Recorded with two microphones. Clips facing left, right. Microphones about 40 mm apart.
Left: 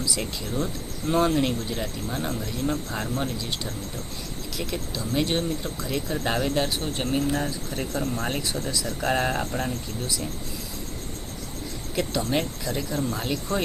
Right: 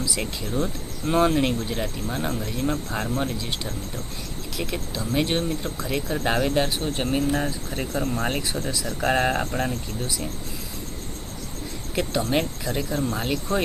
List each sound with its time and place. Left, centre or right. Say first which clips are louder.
0.0 s speech: right 1 dB; centre
11.9 s speech: right 2 dB; right